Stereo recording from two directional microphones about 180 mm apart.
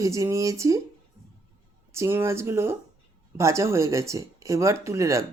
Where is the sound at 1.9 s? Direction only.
15° right (ahead or behind).